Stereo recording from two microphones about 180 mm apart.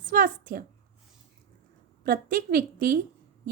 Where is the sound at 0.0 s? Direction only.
50° right (ahead or behind).